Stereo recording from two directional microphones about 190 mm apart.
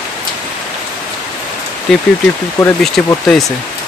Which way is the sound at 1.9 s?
Centre (ahead or behind).